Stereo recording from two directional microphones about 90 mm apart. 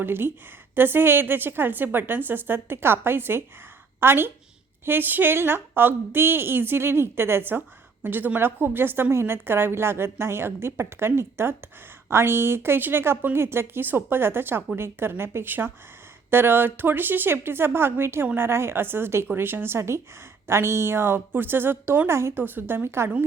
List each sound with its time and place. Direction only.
0.0 s a woman's voice: 25° right (ahead or behind)